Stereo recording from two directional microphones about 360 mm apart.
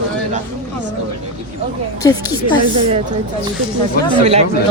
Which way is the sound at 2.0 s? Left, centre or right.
Centre.